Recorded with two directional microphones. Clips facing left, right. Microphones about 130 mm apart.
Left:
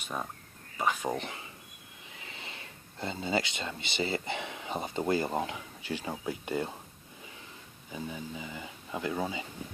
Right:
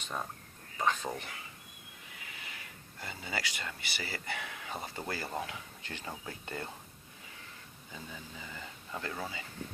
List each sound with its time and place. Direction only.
0.0 s speech: 10° left (ahead or behind)
0.8 s a sound: 10° left (ahead or behind)
1.1 s speech: 20° left (ahead or behind)
7.9 s speech: 15° left (ahead or behind)